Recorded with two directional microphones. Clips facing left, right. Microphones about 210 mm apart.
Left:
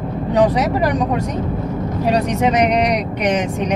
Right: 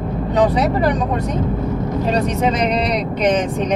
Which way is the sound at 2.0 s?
10° left (ahead or behind).